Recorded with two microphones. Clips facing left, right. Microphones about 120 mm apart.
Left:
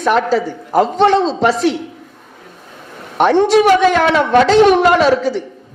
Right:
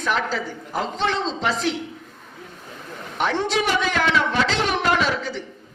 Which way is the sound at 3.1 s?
60° left (ahead or behind).